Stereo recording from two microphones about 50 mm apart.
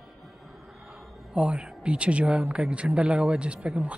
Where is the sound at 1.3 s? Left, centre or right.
Right.